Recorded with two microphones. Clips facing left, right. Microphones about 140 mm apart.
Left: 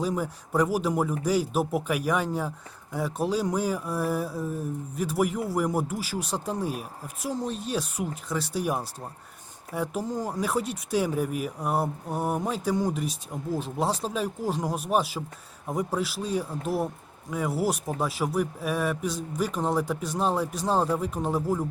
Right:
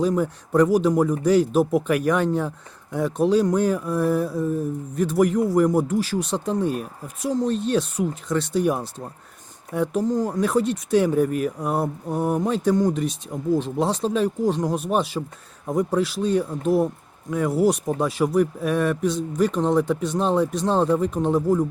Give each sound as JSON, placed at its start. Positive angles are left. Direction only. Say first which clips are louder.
{"t": 0.0, "sound": "speech", "louder": "right 7 dB", "side_deg": 5}